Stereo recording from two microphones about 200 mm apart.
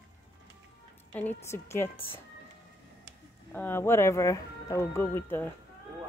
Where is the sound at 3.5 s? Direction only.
10° left (ahead or behind).